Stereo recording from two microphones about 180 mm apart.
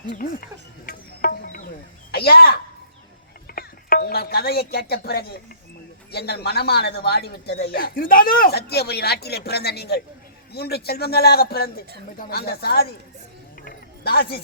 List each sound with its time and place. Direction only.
0.9 s insect: 55° left (ahead or behind)
2.1 s speech: 60° left (ahead or behind)
13.7 s a sound: 60° left (ahead or behind)